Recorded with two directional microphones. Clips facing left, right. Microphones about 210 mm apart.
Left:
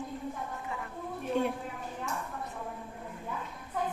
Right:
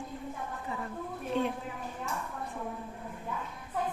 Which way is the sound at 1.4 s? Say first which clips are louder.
Left 1 dB; 10° left (ahead or behind).